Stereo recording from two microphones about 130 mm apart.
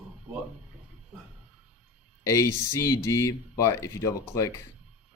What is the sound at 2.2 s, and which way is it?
Speech, 25° left (ahead or behind).